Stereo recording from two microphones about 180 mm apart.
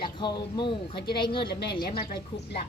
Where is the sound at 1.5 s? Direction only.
65° left (ahead or behind).